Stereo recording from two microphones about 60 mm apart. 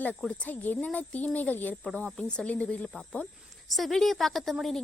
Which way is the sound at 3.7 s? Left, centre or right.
Centre.